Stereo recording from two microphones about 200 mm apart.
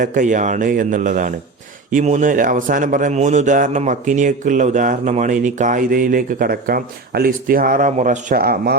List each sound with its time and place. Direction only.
0.0 s a man's voice: 40° right (ahead or behind)